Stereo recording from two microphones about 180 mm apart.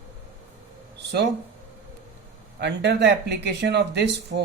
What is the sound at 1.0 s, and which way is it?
Speech, 65° right (ahead or behind).